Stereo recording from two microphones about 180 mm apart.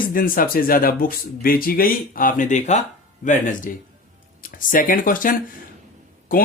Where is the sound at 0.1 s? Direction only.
50° left (ahead or behind).